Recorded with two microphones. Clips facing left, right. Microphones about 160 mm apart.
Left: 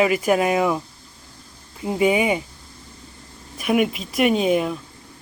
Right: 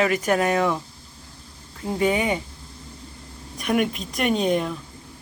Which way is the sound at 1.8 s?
10° left (ahead or behind).